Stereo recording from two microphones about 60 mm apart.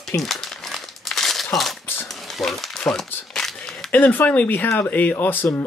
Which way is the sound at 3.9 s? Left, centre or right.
Left.